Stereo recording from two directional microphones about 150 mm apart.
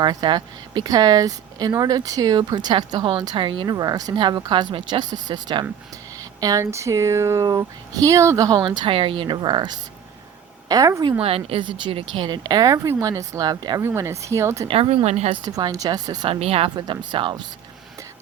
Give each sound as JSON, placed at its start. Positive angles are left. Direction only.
{"t": 0.0, "sound": "speech", "side_deg": -30}
{"t": 11.2, "sound": "speech", "side_deg": -40}
{"t": 14.7, "sound": "speech", "side_deg": -40}
{"t": 15.4, "sound": "speech", "side_deg": -25}
{"t": 16.3, "sound": "speech", "side_deg": -40}
{"t": 16.7, "sound": "speech", "side_deg": -30}